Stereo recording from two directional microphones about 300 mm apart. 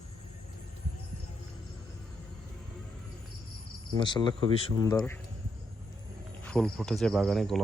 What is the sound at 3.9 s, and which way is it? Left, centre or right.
Speech, centre.